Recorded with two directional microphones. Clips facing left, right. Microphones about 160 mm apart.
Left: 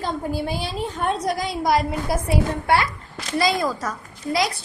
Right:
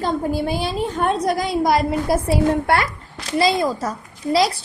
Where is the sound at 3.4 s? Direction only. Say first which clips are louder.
Right 3 dB; 25° right (ahead or behind).